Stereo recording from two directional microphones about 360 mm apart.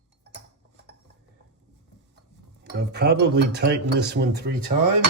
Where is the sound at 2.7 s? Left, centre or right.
Right.